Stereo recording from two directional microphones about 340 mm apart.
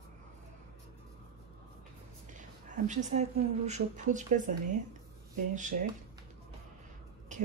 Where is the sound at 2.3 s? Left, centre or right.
Right.